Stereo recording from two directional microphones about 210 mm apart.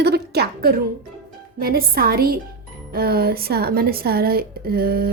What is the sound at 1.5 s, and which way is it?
A woman's voice, 45° right (ahead or behind).